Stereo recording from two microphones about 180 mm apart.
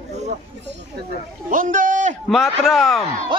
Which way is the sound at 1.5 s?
50° right (ahead or behind).